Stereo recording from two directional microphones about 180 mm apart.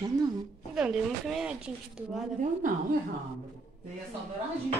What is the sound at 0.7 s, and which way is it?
Speech, 5° right (ahead or behind).